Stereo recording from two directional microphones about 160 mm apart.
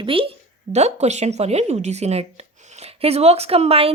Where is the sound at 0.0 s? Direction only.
35° right (ahead or behind).